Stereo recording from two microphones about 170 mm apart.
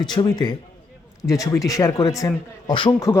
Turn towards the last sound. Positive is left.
turn(degrees=25)  # may be behind; listen again after turning